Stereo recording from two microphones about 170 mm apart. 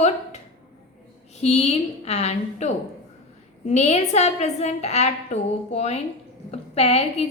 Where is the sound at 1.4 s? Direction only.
40° left (ahead or behind).